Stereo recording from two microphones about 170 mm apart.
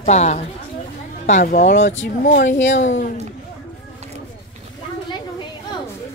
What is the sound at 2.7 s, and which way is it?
Speech, 45° left (ahead or behind).